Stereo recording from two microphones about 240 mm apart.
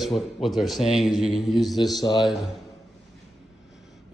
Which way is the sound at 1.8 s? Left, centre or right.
Centre.